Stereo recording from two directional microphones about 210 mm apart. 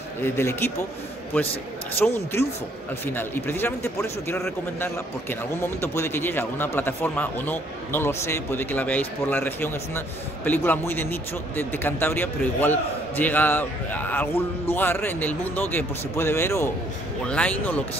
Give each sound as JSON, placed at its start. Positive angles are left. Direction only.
{"t": 0.2, "sound": "speech", "side_deg": 10}
{"t": 2.0, "sound": "speech", "side_deg": 10}